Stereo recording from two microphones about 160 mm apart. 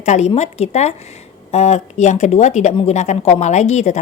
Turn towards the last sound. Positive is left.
turn(degrees=45)  # may be behind; listen again after turning